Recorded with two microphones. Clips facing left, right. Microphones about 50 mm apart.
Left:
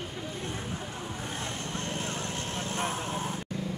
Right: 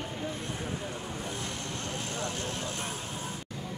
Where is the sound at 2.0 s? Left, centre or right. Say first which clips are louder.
Even; left.